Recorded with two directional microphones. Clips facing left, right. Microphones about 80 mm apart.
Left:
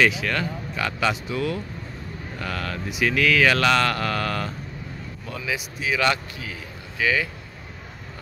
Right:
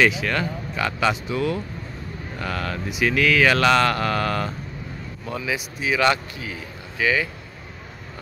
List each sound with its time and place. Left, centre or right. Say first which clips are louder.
0.2 s speech: right 2 dB; centre